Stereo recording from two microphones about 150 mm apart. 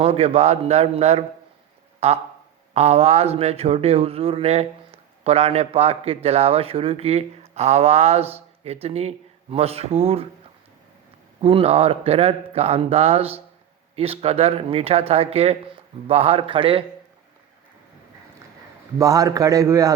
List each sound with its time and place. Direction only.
0.0 s speech: 45° right (ahead or behind)
11.3 s a man's voice: 40° right (ahead or behind)
18.9 s a man's voice: 20° right (ahead or behind)